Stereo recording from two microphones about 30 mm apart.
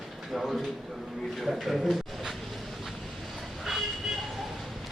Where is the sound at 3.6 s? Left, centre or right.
Centre.